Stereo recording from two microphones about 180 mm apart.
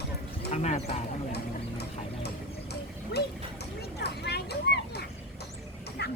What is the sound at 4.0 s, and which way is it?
Speech, 65° left (ahead or behind).